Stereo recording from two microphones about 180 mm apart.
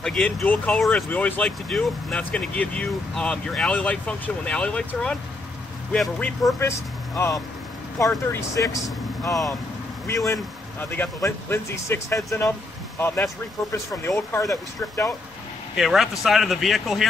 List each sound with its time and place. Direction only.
0.0 s speech: 5° left (ahead or behind)
15.7 s speech: centre (ahead or behind)